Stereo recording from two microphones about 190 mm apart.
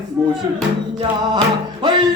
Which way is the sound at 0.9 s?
20° right (ahead or behind).